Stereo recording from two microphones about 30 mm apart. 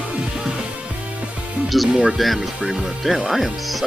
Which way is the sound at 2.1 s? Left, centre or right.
Centre.